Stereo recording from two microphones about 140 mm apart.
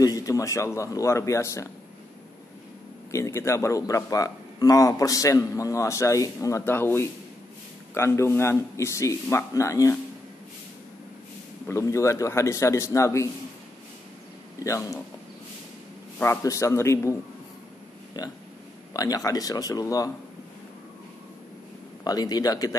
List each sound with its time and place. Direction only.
0.0 s a man's voice: 25° left (ahead or behind)
3.1 s a man's voice: 20° left (ahead or behind)
11.6 s a man's voice: 20° left (ahead or behind)
14.6 s a man's voice: 20° left (ahead or behind)
16.2 s a man's voice: 20° left (ahead or behind)
22.0 s a man's voice: 30° left (ahead or behind)